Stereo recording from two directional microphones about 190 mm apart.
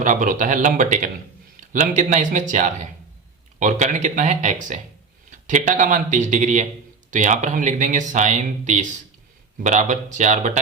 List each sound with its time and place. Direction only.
0.0 s speech: 40° right (ahead or behind)